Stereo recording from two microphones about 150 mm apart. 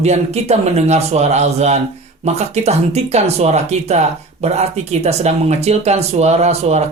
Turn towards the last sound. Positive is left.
turn(degrees=-45)  # may be behind; listen again after turning